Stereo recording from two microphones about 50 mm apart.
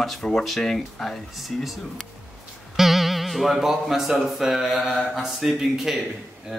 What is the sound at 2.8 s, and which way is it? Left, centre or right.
Speech, centre.